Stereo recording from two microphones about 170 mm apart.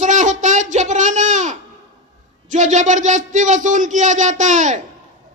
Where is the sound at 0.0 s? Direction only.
45° right (ahead or behind).